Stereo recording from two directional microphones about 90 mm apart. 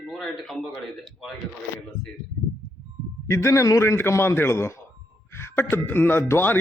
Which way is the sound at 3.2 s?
30° left (ahead or behind).